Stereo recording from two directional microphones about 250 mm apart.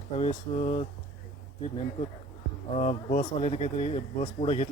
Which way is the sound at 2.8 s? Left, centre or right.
Left.